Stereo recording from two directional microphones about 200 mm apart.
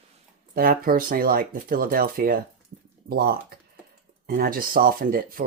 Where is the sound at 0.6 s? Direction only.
45° right (ahead or behind).